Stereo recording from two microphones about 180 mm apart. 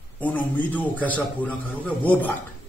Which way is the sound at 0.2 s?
10° left (ahead or behind).